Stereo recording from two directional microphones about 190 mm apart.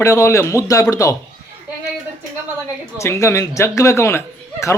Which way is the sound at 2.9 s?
15° left (ahead or behind).